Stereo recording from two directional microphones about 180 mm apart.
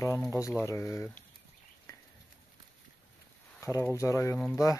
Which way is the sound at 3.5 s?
15° left (ahead or behind).